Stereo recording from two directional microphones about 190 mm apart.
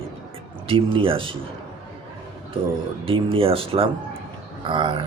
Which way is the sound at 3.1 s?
30° right (ahead or behind).